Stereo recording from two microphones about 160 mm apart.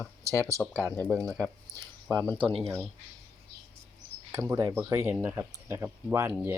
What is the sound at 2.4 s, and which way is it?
Speech, 35° right (ahead or behind).